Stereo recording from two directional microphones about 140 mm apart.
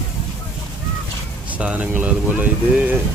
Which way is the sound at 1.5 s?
10° right (ahead or behind).